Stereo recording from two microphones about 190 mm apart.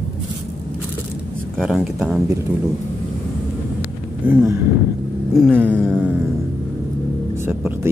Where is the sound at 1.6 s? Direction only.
Centre (ahead or behind).